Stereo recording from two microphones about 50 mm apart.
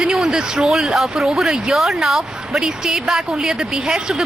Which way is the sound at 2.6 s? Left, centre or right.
Centre.